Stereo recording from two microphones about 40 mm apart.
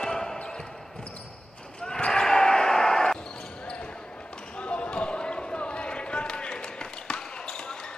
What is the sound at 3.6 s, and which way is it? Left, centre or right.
Basketball bounce, left.